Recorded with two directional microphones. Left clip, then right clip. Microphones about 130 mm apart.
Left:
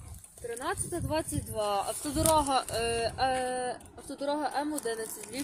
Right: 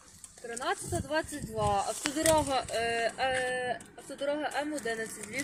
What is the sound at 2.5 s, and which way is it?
Speech, 45° left (ahead or behind).